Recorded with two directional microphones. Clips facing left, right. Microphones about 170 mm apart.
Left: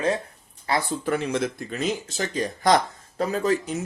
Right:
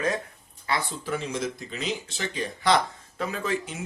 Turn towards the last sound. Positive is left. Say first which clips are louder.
# left 6 dB
turn(degrees=40)  # may be behind; listen again after turning